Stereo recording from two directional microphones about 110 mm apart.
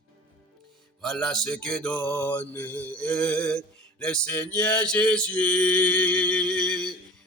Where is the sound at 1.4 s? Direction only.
10° left (ahead or behind).